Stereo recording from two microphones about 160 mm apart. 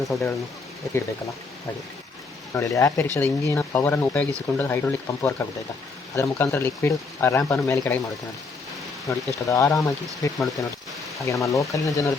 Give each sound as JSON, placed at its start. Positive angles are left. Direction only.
{"t": 0.1, "sound": "speech", "side_deg": 0}
{"t": 2.5, "sound": "speech", "side_deg": 20}
{"t": 9.0, "sound": "speech", "side_deg": 20}